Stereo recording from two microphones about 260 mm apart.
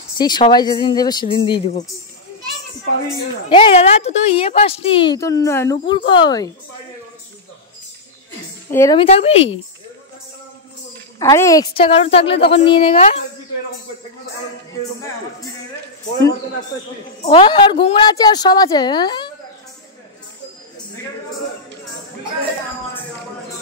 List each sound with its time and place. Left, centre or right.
0.2 s a woman's voice: centre
3.4 s a woman's voice: centre
8.6 s a woman's voice: centre
11.1 s a woman's voice: centre
17.2 s a woman's voice: left